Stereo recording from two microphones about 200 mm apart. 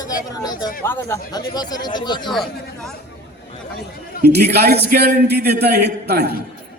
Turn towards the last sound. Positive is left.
turn(degrees=-55)  # may be behind; listen again after turning